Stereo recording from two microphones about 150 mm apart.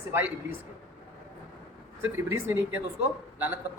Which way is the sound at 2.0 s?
15° right (ahead or behind).